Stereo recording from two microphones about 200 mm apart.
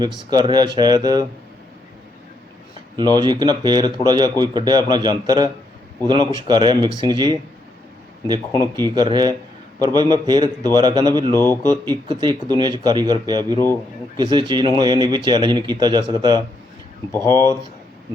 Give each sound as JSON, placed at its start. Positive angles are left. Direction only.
{"t": 0.3, "sound": "speech", "side_deg": -20}
{"t": 2.9, "sound": "speech", "side_deg": -20}
{"t": 8.7, "sound": "speech", "side_deg": -20}
{"t": 11.3, "sound": "speech", "side_deg": 15}
{"t": 11.7, "sound": "speech", "side_deg": -20}
{"t": 17.1, "sound": "speech", "side_deg": 15}